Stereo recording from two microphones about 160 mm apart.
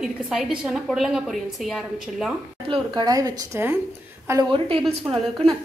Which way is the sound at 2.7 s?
30° right (ahead or behind).